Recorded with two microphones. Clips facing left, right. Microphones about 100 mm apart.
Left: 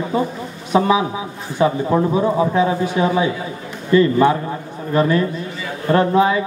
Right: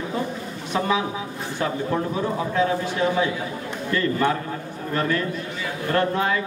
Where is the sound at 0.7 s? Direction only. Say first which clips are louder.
Left 7 dB; 20° left (ahead or behind).